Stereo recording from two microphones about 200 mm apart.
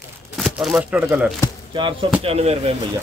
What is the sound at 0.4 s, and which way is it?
Speech, 5° right (ahead or behind).